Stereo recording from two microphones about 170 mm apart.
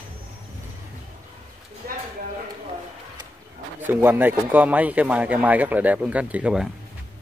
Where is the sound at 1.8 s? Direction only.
60° right (ahead or behind).